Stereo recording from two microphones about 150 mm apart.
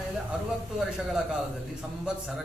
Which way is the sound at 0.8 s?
5° right (ahead or behind).